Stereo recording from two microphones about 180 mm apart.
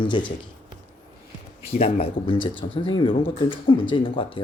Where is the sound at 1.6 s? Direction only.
35° left (ahead or behind).